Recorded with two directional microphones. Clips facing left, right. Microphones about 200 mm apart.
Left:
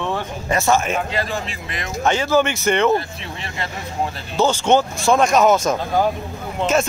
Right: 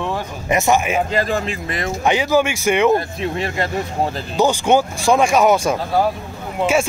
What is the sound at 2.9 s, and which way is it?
Speech, 45° right (ahead or behind).